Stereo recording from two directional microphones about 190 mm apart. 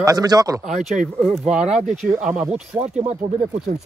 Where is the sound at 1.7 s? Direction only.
40° right (ahead or behind).